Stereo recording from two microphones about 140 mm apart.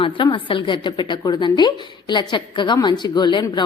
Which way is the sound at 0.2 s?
35° left (ahead or behind).